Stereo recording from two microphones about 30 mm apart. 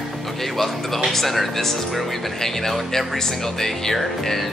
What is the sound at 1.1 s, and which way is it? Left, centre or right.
Music, centre.